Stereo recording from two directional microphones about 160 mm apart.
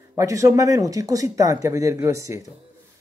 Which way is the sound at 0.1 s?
20° right (ahead or behind).